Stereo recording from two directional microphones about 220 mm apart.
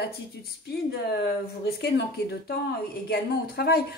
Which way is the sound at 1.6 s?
45° left (ahead or behind).